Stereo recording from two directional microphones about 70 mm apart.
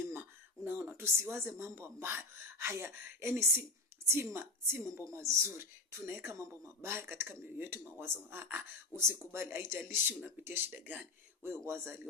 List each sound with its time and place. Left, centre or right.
0.1 s a woman's voice: right
11.4 s speech: right